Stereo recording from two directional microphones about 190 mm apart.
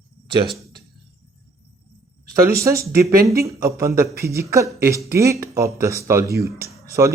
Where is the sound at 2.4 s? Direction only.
15° right (ahead or behind).